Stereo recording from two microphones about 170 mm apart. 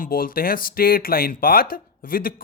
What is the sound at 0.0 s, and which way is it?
Speech, 55° left (ahead or behind).